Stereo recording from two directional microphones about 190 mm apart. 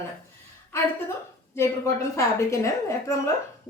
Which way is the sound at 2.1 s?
15° left (ahead or behind).